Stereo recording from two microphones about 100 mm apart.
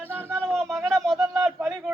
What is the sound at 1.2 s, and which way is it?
Speech, 35° right (ahead or behind).